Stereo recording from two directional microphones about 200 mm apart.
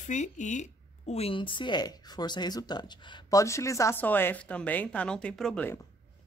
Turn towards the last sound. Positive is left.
turn(degrees=10)  # may be behind; listen again after turning